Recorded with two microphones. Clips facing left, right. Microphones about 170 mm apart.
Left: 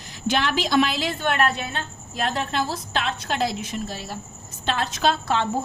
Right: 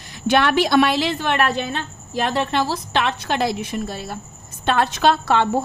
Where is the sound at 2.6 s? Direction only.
70° right (ahead or behind).